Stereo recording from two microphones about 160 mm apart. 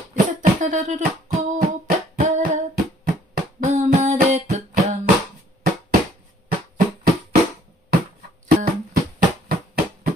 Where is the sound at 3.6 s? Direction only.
45° right (ahead or behind).